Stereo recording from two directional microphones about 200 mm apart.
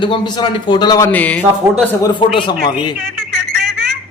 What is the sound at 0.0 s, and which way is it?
A man's voice, 20° left (ahead or behind).